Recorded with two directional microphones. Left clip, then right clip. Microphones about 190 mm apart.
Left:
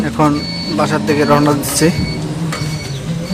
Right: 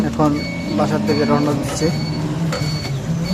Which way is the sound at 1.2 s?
30° left (ahead or behind).